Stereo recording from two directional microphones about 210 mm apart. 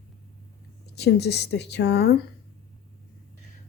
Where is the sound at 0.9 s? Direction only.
50° left (ahead or behind).